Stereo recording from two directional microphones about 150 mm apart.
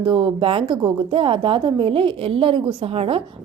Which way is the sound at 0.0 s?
30° right (ahead or behind).